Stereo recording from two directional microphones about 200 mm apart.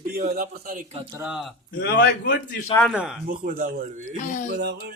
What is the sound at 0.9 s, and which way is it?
Speech, 25° right (ahead or behind).